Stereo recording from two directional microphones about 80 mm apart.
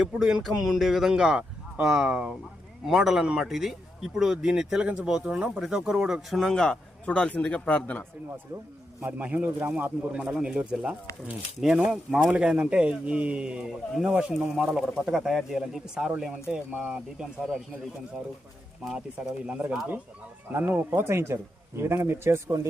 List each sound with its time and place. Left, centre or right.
0.0 s a man's voice: centre
9.0 s a man's voice: right
18.9 s speech: centre
20.5 s speech: right